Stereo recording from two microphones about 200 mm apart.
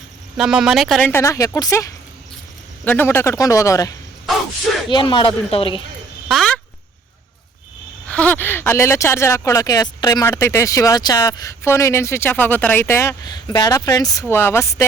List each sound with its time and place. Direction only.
0.3 s speech: 5° right (ahead or behind)
1.1 s speech: 15° left (ahead or behind)
6.2 s speech: centre (ahead or behind)
8.0 s speech: 5° left (ahead or behind)